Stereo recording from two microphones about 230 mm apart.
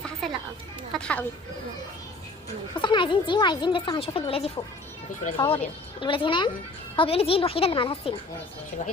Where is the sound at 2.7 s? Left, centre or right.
Left.